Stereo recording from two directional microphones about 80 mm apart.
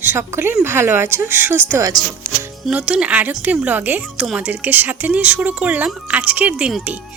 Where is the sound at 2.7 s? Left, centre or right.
Centre.